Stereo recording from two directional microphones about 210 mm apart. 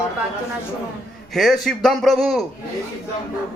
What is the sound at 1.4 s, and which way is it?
A man's voice, centre (ahead or behind).